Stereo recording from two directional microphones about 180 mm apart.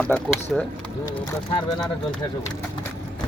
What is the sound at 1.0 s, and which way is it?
Speech, 25° left (ahead or behind).